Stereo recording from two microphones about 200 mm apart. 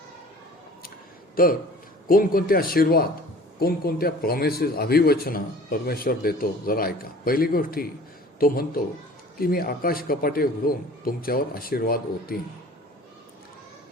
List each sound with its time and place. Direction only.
1.4 s a man's voice: 45° left (ahead or behind)